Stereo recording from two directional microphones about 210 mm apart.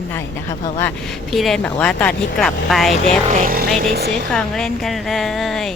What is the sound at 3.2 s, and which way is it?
Speech, 35° right (ahead or behind).